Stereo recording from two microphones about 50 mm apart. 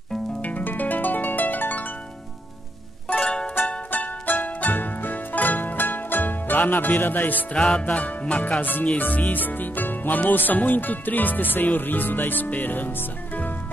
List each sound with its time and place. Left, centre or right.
0.4 s harp: left
3.9 s music: left
7.5 s music: centre
7.8 s music: left